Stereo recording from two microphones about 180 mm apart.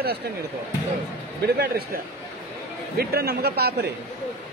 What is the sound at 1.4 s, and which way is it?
Speech, 65° right (ahead or behind).